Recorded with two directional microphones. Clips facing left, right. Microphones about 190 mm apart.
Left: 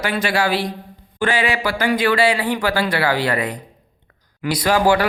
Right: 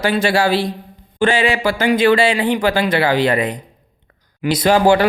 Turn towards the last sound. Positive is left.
turn(degrees=-25)  # may be behind; listen again after turning